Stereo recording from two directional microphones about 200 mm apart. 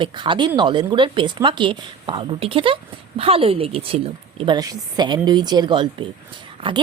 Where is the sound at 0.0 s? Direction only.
25° right (ahead or behind).